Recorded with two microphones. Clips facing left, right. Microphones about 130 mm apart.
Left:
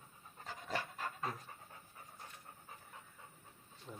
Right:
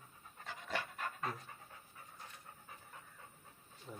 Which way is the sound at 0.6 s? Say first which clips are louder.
Even; 40° left (ahead or behind).